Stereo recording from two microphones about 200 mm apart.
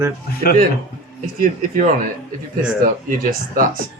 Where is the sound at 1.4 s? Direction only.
45° right (ahead or behind).